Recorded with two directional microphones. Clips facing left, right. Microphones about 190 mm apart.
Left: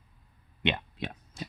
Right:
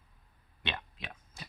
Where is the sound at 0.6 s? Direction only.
20° left (ahead or behind).